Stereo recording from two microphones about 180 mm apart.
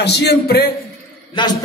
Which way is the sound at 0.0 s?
70° left (ahead or behind).